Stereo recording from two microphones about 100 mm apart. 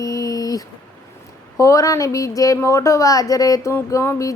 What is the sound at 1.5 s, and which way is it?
A woman's voice, 30° left (ahead or behind).